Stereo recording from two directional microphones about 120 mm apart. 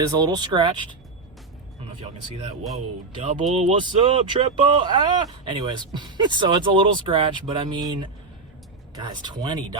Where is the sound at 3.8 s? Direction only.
45° right (ahead or behind).